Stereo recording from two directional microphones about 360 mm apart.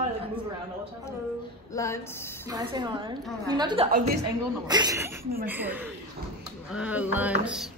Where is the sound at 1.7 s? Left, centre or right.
Centre.